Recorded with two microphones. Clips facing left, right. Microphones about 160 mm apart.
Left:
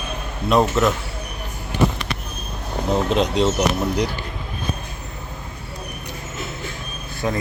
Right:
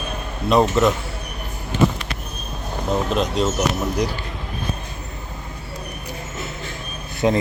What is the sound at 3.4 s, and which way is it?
Speech, 15° left (ahead or behind).